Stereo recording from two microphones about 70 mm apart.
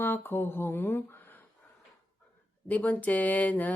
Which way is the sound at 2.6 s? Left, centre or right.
Left.